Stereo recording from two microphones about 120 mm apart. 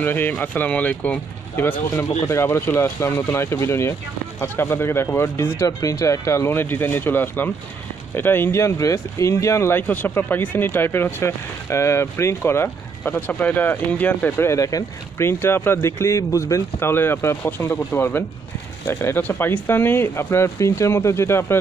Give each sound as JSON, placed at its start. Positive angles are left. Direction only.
{"t": 0.0, "sound": "speech", "side_deg": 15}